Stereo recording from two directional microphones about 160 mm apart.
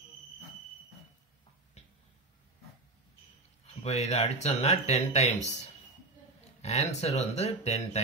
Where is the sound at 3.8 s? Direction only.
40° left (ahead or behind).